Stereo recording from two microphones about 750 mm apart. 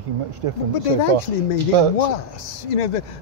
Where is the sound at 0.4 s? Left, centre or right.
Right.